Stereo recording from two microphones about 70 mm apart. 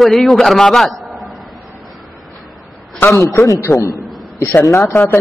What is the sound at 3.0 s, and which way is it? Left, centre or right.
A man's voice, left.